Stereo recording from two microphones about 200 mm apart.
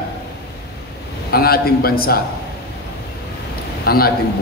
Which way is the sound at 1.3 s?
50° left (ahead or behind).